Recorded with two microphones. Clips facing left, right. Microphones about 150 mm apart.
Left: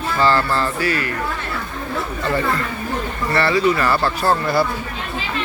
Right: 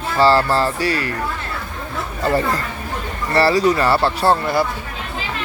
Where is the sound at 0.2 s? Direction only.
35° right (ahead or behind).